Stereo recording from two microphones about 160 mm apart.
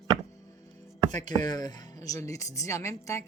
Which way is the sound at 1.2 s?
25° left (ahead or behind).